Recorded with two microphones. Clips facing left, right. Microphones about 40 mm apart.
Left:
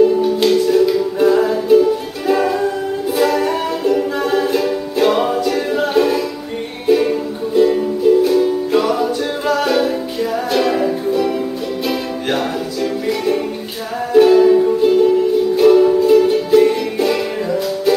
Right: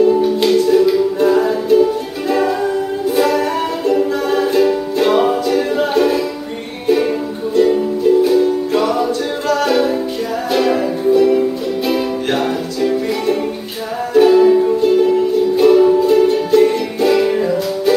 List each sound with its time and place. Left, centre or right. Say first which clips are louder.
0.0 s music: even; centre